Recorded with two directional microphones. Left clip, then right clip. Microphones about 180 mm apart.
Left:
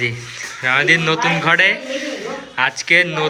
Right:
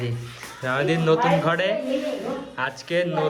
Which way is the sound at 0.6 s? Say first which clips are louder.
Left 8 dB; 20° left (ahead or behind).